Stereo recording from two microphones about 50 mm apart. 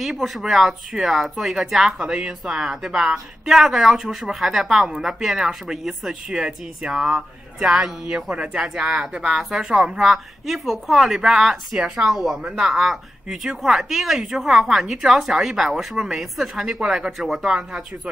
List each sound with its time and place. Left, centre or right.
0.0 s speech: centre
16.6 s speech: centre
17.2 s speech: centre
17.6 s speech: right